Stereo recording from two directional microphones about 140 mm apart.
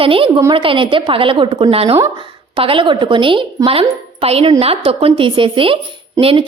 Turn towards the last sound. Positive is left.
turn(degrees=-40)  # may be behind; listen again after turning